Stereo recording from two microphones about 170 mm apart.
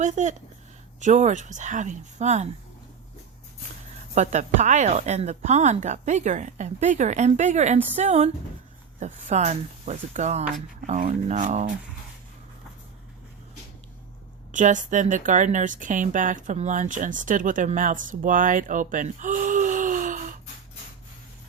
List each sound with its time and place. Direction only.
0.0 s a woman's voice: 45° right (ahead or behind)
4.1 s a woman's voice: 45° right (ahead or behind)
14.5 s a woman's voice: 50° right (ahead or behind)